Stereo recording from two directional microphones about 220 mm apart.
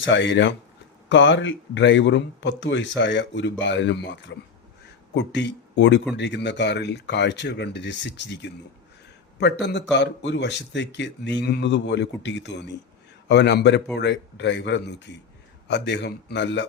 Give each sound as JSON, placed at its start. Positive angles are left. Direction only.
{"t": 0.0, "sound": "speech", "side_deg": 55}